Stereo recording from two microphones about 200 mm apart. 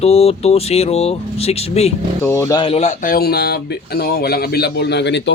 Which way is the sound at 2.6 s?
30° left (ahead or behind).